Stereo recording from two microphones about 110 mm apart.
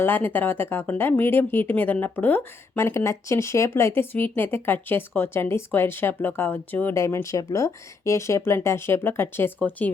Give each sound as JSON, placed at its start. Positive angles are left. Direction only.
{"t": 0.0, "sound": "speech", "side_deg": 20}